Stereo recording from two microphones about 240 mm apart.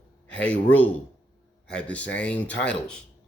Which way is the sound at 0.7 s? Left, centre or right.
Centre.